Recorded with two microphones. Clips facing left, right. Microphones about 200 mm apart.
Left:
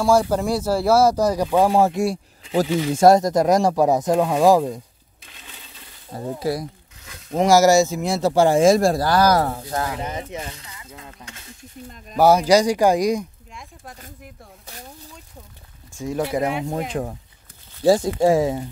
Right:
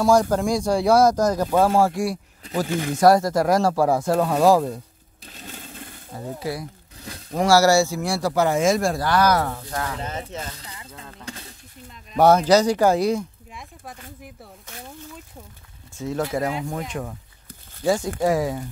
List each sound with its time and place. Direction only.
0.0 s speech: 5° left (ahead or behind)
5.2 s a sound: 40° right (ahead or behind)
6.1 s a man's voice: 40° left (ahead or behind)
7.2 s a man's voice: 20° left (ahead or behind)
9.9 s speech: 15° left (ahead or behind)
10.6 s a sound: 35° right (ahead or behind)
12.2 s speech: 10° left (ahead or behind)
13.5 s a sound: centre (ahead or behind)
16.0 s speech: 15° left (ahead or behind)
16.6 s a man's voice: 30° left (ahead or behind)